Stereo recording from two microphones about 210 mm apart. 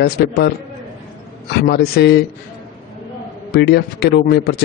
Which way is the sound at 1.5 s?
50° left (ahead or behind).